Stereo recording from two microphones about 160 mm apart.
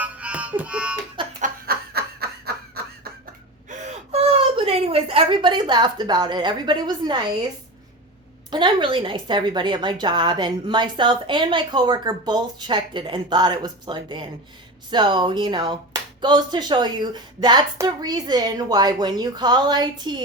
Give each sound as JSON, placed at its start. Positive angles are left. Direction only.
{"t": 0.0, "sound": "music", "side_deg": -10}
{"t": 1.4, "sound": "snicker", "side_deg": -70}
{"t": 3.7, "sound": "gasp", "side_deg": -45}
{"t": 8.4, "sound": "a woman's voice", "side_deg": -30}